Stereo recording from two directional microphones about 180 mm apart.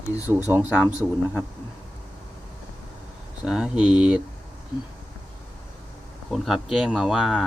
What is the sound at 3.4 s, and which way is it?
Speech, 5° right (ahead or behind).